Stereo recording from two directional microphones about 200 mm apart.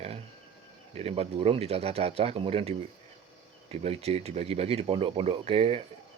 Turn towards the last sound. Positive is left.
turn(degrees=-30)  # may be behind; listen again after turning